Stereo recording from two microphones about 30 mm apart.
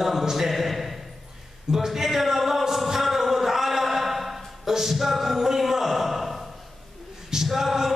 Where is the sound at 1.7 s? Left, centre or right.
Centre.